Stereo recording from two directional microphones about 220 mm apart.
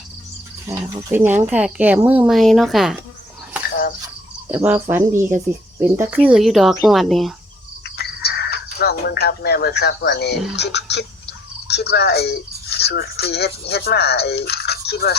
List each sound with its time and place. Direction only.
0.7 s speech: 10° right (ahead or behind)
4.5 s speech: 5° right (ahead or behind)
7.9 s a sound: 45° left (ahead or behind)
10.5 s speech: 50° left (ahead or behind)